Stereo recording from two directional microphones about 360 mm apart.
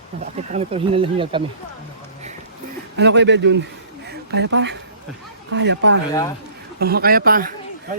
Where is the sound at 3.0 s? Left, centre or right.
Right.